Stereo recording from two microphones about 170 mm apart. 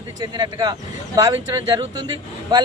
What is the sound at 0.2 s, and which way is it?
A man's voice, 25° right (ahead or behind).